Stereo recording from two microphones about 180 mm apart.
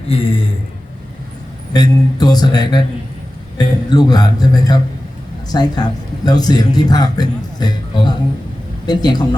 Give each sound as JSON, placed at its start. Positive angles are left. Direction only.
{"t": 0.1, "sound": "speech", "side_deg": 30}
{"t": 1.7, "sound": "speech", "side_deg": 20}